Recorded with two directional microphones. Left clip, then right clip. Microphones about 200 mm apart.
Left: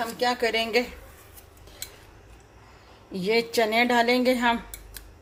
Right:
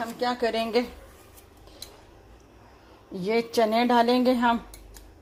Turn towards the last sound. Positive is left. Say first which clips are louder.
# even
turn(degrees=-15)  # may be behind; listen again after turning